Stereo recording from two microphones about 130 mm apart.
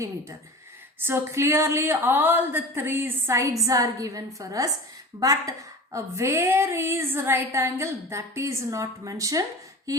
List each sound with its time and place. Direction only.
1.0 s a woman's voice: 20° right (ahead or behind)